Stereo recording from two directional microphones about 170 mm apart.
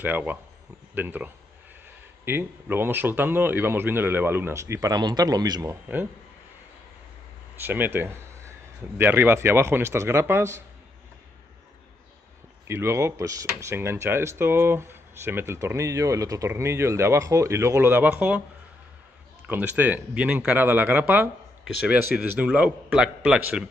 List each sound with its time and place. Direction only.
0.0 s speech: 10° right (ahead or behind)
7.6 s speech: 10° right (ahead or behind)
12.6 s speech: 15° right (ahead or behind)
19.4 s speech: 10° right (ahead or behind)